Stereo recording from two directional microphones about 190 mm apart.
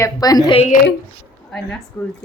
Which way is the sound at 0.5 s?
35° left (ahead or behind).